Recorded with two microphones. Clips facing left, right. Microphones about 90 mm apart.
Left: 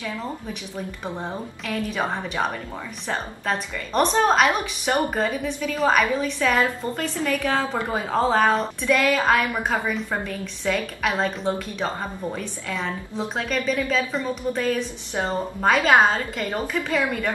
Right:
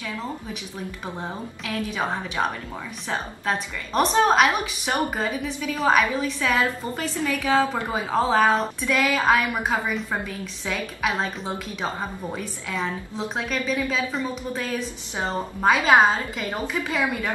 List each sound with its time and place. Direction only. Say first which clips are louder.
1.0 s a woman's voice: left 2 dB; centre (ahead or behind)